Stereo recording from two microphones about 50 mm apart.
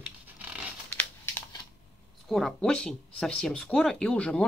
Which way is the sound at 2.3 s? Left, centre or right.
Centre.